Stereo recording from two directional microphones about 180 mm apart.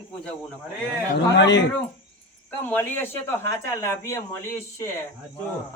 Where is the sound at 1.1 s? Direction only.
80° left.